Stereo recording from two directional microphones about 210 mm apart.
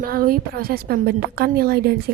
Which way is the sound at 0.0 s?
45° right (ahead or behind).